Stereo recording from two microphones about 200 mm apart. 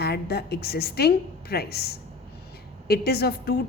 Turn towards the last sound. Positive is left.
turn(degrees=50)  # may be behind; listen again after turning